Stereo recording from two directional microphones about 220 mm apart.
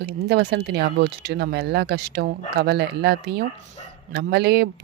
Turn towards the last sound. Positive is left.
turn(degrees=-50)  # may be behind; listen again after turning